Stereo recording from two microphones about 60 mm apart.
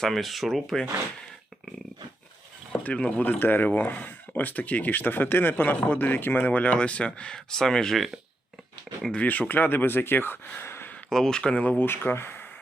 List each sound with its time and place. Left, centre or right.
0.0 s speech: centre
2.7 s speech: left
3.3 s speech: left; by 8.1 s centre
9.1 s speech: left
10.6 s a sound: left
11.1 s speech: centre
11.8 s speech: left